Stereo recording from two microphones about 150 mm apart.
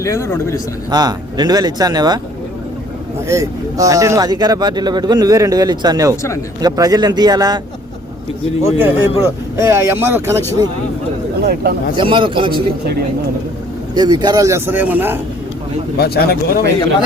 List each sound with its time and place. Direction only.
0.0 s a man's voice: 20° left (ahead or behind)
0.9 s speech: 25° right (ahead or behind)
3.2 s speech: 20° right (ahead or behind)
8.6 s speech: 15° right (ahead or behind)
11.4 s speech: 90° right
11.9 s a man's voice: 35° right (ahead or behind)
13.9 s speech: 30° right (ahead or behind); by 15.2 s 15° right (ahead or behind)
16.0 s speech: 90° left